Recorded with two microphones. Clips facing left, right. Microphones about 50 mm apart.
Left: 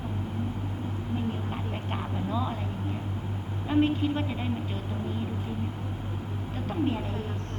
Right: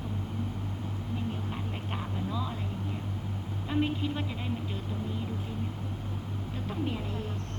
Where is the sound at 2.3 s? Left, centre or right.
Left.